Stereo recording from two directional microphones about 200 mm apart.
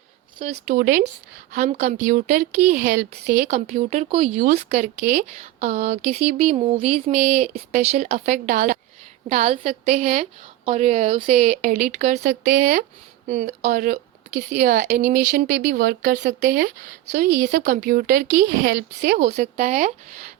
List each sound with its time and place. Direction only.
0.7 s speech: 45° right (ahead or behind)
13.2 s speech: 35° right (ahead or behind)